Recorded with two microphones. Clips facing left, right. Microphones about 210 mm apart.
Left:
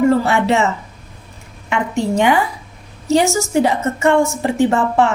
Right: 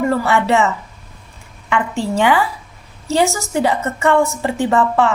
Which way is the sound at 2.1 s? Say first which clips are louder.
Even; 15° left (ahead or behind).